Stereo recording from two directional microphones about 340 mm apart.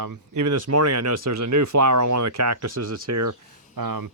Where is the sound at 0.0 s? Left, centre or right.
Right.